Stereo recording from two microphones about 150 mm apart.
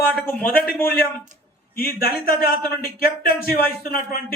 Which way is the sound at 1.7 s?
80° left.